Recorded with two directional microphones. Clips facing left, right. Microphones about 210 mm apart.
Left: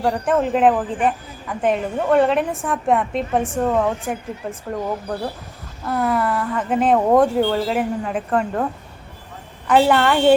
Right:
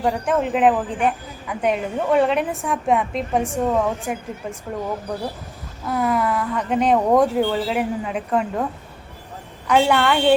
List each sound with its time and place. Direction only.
0.0 s a woman's voice: centre (ahead or behind)
5.8 s a woman's voice: centre (ahead or behind)
9.6 s a woman's voice: centre (ahead or behind)